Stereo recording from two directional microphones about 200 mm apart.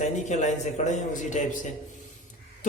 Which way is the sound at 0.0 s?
35° left (ahead or behind).